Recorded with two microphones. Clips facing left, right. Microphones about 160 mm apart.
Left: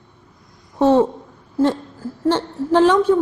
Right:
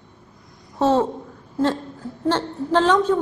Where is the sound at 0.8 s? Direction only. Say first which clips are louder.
Left 4 dB; 15° left (ahead or behind).